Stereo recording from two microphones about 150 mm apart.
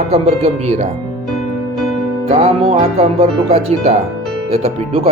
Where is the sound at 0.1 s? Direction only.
45° right (ahead or behind).